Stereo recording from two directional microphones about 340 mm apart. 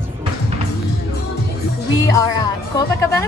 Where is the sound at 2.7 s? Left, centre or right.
Centre.